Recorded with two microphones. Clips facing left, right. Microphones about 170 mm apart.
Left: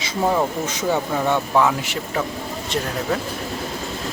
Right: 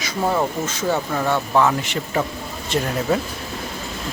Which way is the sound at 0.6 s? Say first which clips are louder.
Even; 15° left (ahead or behind).